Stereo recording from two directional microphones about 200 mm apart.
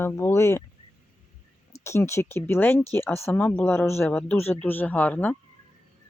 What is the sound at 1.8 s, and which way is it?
Speech, 15° left (ahead or behind).